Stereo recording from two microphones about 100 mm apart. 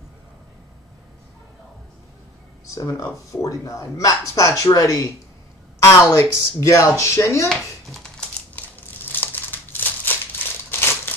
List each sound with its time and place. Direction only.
2.6 s speech: 35° left (ahead or behind)
7.4 s a sound: 5° left (ahead or behind)
8.5 s crumpling: 20° left (ahead or behind)